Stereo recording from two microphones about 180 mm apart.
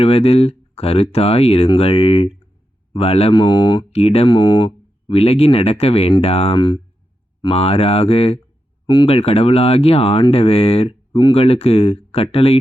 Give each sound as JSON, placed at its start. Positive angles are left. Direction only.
{"t": 0.0, "sound": "speech", "side_deg": 30}